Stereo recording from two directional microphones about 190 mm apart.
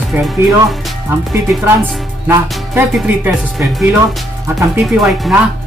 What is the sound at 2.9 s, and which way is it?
Speech, 5° right (ahead or behind).